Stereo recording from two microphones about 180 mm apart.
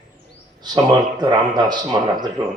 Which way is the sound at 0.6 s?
25° right (ahead or behind).